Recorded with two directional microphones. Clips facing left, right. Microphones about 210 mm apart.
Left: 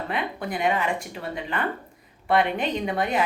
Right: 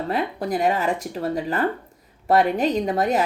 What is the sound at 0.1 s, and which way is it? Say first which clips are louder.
Speech: right 6 dB; 40° right (ahead or behind).